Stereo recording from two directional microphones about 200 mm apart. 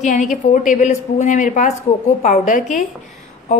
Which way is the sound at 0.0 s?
35° left (ahead or behind).